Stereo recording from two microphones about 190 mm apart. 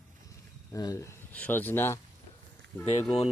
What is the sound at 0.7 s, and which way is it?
Speech, 15° left (ahead or behind).